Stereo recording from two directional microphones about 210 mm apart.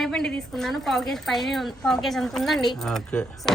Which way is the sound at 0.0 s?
Centre (ahead or behind).